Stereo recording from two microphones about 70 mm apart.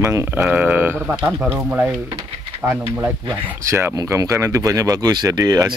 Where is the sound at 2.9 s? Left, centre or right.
Right.